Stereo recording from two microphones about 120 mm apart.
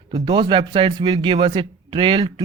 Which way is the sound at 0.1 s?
40° right (ahead or behind).